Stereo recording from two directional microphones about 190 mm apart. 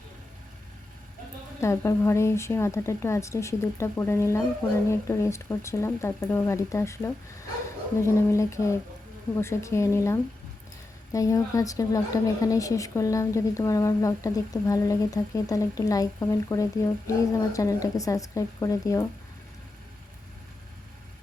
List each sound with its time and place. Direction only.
1.6 s a woman's voice: 15° left (ahead or behind)